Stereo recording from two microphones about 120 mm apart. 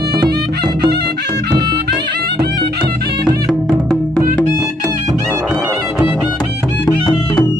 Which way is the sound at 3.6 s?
5° left (ahead or behind).